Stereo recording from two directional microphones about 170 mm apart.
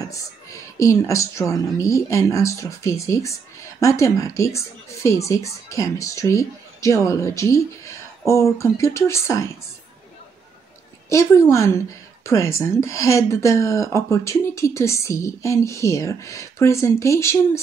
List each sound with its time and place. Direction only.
0.0 s speech: 20° left (ahead or behind)
11.1 s speech: 15° left (ahead or behind)